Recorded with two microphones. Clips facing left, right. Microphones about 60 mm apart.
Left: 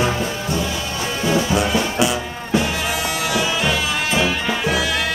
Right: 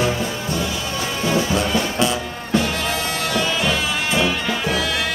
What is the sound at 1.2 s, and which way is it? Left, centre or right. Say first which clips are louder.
Music: left 2 dB; centre.